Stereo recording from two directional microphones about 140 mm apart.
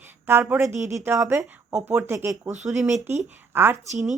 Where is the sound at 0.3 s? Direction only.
15° right (ahead or behind).